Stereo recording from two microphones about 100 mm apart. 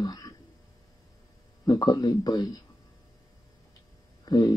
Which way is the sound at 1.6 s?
45° left (ahead or behind).